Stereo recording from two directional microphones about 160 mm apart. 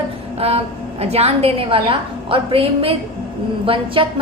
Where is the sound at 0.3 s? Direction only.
40° right (ahead or behind).